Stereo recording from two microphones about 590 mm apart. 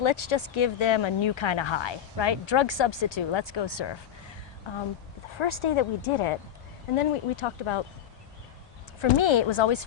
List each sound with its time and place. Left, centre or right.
0.0 s speech: left
5.4 s speech: left
9.0 s speech: left